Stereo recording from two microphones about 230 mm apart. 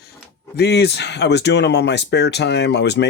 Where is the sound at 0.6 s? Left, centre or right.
Left.